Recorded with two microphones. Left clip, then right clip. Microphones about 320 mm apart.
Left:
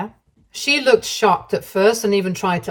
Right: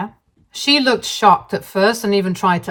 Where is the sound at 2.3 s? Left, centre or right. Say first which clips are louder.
Right 4 dB; centre.